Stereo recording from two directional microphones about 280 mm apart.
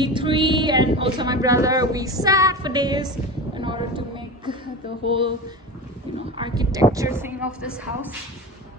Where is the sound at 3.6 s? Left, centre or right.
Centre.